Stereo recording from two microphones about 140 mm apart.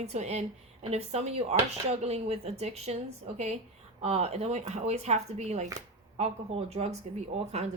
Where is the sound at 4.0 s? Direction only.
50° right (ahead or behind).